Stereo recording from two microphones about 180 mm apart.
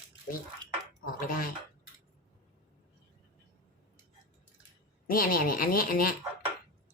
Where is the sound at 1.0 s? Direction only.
50° left (ahead or behind).